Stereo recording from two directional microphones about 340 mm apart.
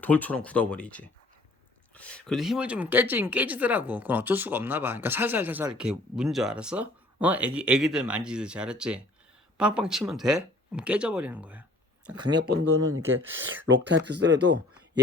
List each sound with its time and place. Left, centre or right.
0.0 s speech: centre
12.4 s speech: right